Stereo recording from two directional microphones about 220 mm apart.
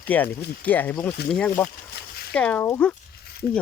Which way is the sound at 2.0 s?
45° left (ahead or behind).